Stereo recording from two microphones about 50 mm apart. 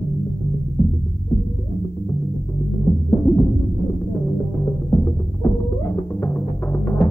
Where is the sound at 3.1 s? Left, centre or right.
Left.